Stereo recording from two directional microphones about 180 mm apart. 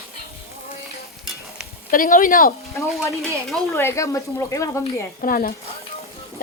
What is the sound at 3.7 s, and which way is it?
A woman's voice, 15° left (ahead or behind).